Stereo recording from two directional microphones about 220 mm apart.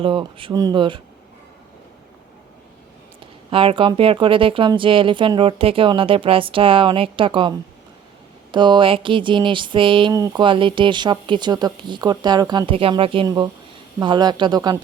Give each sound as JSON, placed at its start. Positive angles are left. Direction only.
{"t": 0.0, "sound": "speech", "side_deg": -25}
{"t": 3.5, "sound": "speech", "side_deg": -25}
{"t": 8.5, "sound": "speech", "side_deg": -20}